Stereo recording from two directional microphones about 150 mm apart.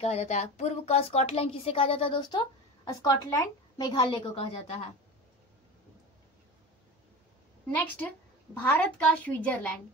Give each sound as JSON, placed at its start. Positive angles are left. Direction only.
{"t": 0.0, "sound": "speech", "side_deg": 45}
{"t": 2.8, "sound": "speech", "side_deg": 20}
{"t": 7.7, "sound": "a woman's voice", "side_deg": 10}